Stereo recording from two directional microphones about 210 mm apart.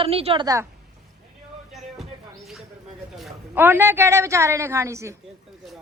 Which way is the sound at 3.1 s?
5° right (ahead or behind).